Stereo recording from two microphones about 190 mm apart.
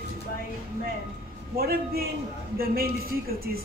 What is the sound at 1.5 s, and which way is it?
A woman's voice, 50° right (ahead or behind).